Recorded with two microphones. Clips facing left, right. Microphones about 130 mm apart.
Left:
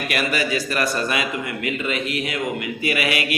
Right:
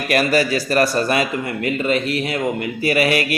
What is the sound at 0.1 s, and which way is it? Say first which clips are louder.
A man's voice: right 7 dB; 40° right (ahead or behind).